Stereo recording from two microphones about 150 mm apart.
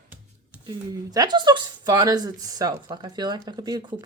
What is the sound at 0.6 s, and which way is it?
Speech, 25° right (ahead or behind).